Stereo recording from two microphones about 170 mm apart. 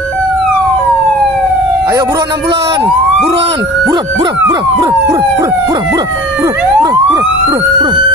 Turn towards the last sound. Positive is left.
turn(degrees=-20)  # may be behind; listen again after turning